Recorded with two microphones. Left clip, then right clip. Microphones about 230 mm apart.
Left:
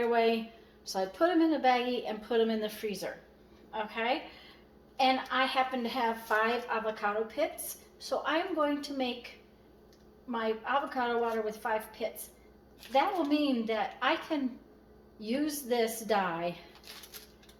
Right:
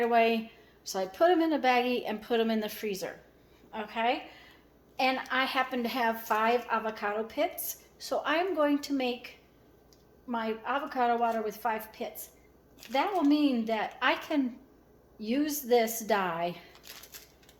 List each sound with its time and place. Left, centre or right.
0.9 s a woman's voice: right
10.3 s speech: right
12.9 s a woman's voice: right